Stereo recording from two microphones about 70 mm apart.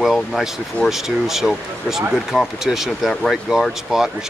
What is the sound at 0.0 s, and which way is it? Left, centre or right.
Speech, centre.